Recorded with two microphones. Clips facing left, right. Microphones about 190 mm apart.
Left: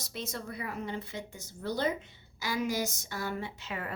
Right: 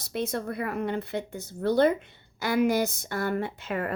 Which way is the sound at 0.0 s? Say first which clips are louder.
Right 9 dB; 60° right (ahead or behind).